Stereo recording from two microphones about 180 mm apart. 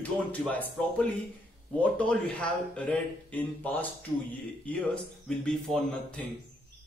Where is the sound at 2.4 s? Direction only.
5° left (ahead or behind).